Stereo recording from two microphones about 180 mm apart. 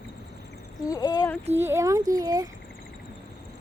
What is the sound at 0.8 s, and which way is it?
Speech, 20° left (ahead or behind).